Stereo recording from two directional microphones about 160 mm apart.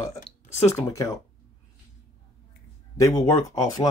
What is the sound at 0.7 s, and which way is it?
Speech, 20° left (ahead or behind).